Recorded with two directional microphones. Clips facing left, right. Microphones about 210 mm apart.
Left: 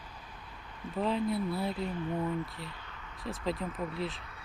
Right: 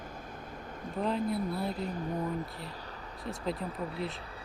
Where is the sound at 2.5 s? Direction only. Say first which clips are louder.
Right 3 dB; 35° right (ahead or behind).